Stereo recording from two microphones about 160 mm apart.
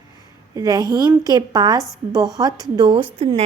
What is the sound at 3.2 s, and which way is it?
Speech, 40° right (ahead or behind).